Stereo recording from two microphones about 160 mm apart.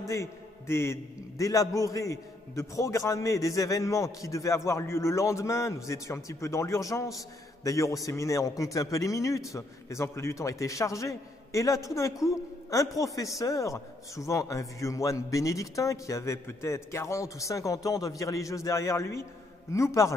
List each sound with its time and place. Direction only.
0.0 s a man's voice: 20° left (ahead or behind)